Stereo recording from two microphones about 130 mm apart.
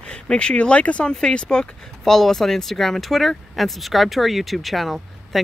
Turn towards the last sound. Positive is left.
turn(degrees=0)  # may be behind; listen again after turning